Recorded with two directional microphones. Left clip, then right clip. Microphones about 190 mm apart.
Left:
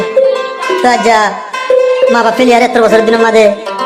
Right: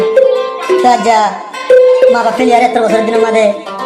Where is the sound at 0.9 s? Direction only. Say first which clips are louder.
Left 1 dB; 20° left (ahead or behind).